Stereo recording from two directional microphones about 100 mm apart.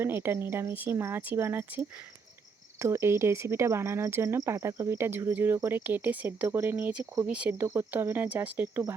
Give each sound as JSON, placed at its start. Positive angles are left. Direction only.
{"t": 0.0, "sound": "speech", "side_deg": -25}